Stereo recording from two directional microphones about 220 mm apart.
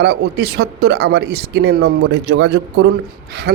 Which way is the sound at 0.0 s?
45° right (ahead or behind).